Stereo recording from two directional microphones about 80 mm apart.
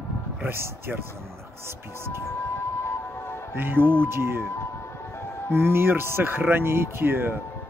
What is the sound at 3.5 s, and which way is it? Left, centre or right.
Speech, right.